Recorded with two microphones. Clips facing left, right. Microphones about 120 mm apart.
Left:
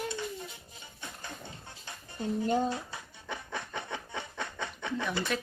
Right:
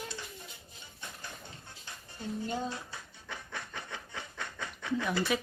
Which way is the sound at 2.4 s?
45° left (ahead or behind).